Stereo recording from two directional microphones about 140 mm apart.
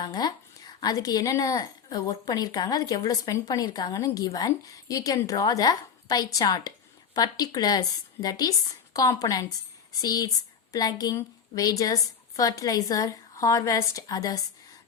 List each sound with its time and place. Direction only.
0.0 s speech: 30° left (ahead or behind)